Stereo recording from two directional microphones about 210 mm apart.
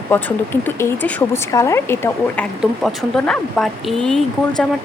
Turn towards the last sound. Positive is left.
turn(degrees=5)  # may be behind; listen again after turning